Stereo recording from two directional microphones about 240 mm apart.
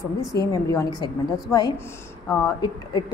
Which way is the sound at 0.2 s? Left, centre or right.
Centre.